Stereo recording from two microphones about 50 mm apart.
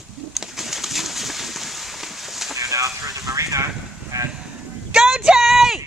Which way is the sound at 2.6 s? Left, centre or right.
Right.